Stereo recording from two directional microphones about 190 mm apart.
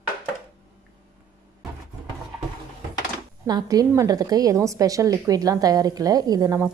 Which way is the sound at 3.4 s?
20° right (ahead or behind).